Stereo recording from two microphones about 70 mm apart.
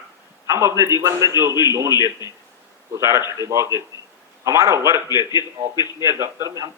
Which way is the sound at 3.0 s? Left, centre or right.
Right.